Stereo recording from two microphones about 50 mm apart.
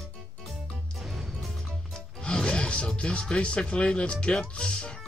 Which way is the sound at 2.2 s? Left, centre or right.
Centre.